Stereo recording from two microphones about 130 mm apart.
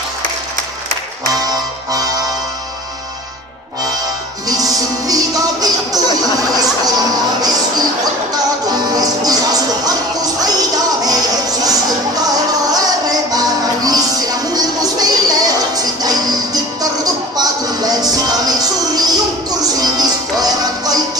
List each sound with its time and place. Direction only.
1.5 s music: 30° right (ahead or behind)
4.5 s music: 30° right (ahead or behind)
7.4 s music: 30° right (ahead or behind)